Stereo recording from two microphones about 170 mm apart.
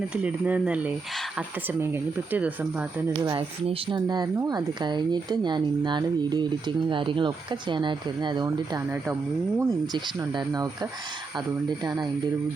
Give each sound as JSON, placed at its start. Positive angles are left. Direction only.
{"t": 0.1, "sound": "speech", "side_deg": -5}
{"t": 3.2, "sound": "speech", "side_deg": -30}